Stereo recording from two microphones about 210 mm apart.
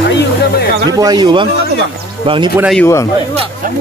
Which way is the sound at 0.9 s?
20° right (ahead or behind).